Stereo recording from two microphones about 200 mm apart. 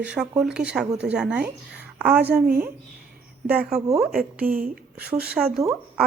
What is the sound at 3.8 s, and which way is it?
Speech, 30° right (ahead or behind).